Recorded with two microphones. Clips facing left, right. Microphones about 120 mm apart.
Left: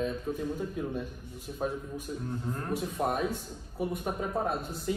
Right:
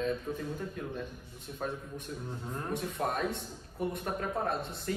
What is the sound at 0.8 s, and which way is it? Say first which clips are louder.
A man's voice: left 4 dB; 5° left (ahead or behind).